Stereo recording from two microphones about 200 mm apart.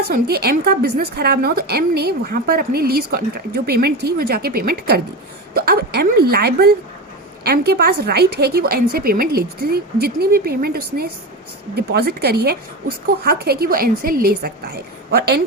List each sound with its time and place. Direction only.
0.1 s a woman's voice: 50° right (ahead or behind)